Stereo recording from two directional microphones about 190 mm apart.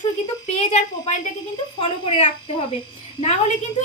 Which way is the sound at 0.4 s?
35° left (ahead or behind).